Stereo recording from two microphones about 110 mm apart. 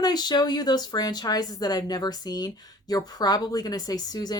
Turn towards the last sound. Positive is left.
turn(degrees=40)  # may be behind; listen again after turning